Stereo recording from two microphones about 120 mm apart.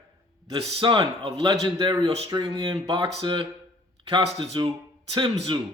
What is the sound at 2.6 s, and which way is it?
Speech, 50° right (ahead or behind).